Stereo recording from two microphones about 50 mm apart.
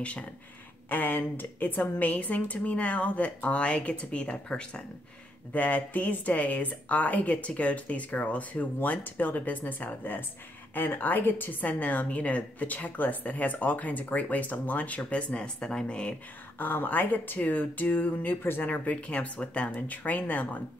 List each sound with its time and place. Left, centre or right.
0.8 s a woman's voice: left
5.5 s a woman's voice: left
16.5 s a woman's voice: left
18.7 s a woman's voice: left